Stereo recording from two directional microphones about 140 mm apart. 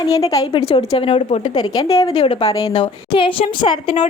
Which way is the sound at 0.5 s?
40° left (ahead or behind).